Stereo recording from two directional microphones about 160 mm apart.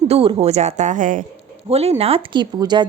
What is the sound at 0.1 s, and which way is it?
A woman's voice, 35° right (ahead or behind).